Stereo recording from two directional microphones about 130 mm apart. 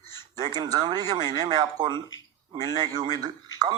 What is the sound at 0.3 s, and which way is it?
Speech, 30° right (ahead or behind).